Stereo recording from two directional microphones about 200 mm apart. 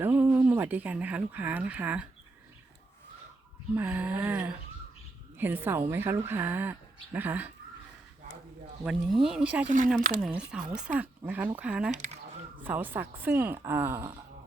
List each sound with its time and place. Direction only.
0.0 s speech: 10° right (ahead or behind)
3.8 s a woman's voice: 10° right (ahead or behind)
8.8 s speech: centre (ahead or behind)
9.6 s speech: 40° right (ahead or behind)
10.2 s a woman's voice: 5° right (ahead or behind)
11.9 s speech: 35° right (ahead or behind)
12.6 s a woman's voice: 10° right (ahead or behind)